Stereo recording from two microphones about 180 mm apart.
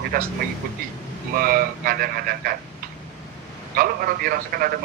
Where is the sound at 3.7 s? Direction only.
55° right (ahead or behind).